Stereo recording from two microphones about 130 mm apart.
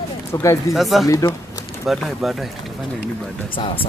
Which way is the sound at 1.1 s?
25° left (ahead or behind).